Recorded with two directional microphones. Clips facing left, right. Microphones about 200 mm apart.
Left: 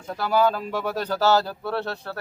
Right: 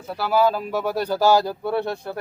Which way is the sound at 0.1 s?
5° right (ahead or behind).